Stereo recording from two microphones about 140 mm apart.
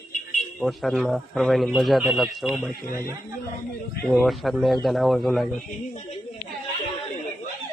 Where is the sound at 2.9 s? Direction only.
20° right (ahead or behind).